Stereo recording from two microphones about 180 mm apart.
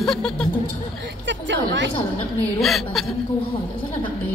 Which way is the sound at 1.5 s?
85° right.